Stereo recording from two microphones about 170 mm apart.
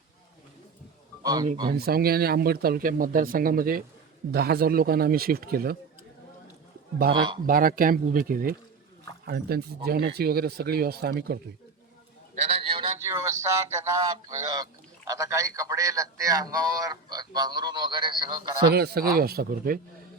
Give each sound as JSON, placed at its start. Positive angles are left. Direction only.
{"t": 1.2, "sound": "speech", "side_deg": -20}
{"t": 1.7, "sound": "speech", "side_deg": -65}
{"t": 7.1, "sound": "speech", "side_deg": -25}
{"t": 7.4, "sound": "speech", "side_deg": -60}
{"t": 9.2, "sound": "speech", "side_deg": -70}
{"t": 12.4, "sound": "a sound", "side_deg": -35}
{"t": 13.0, "sound": "speech", "side_deg": -15}
{"t": 18.7, "sound": "speech", "side_deg": -70}